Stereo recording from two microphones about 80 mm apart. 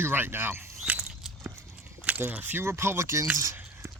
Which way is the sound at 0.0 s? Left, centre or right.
Right.